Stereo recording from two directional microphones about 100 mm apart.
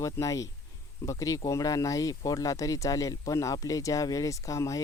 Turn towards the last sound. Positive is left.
turn(degrees=30)  # may be behind; listen again after turning